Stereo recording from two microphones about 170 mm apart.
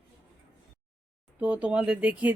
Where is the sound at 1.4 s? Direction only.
10° right (ahead or behind).